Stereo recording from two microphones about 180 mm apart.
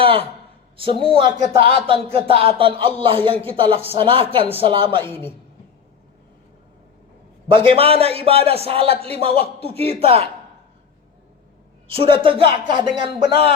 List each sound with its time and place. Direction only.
0.0 s a sound: 30° right (ahead or behind)
0.8 s a man's voice: 30° right (ahead or behind)
7.4 s a man's voice: 30° right (ahead or behind)
11.9 s speech: 30° right (ahead or behind)